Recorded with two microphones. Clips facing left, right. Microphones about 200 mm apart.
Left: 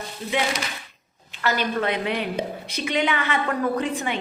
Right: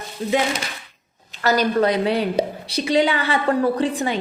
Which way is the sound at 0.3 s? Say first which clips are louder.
Right 4 dB; 40° right (ahead or behind).